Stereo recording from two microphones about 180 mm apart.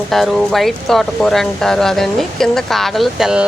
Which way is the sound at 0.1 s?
Centre (ahead or behind).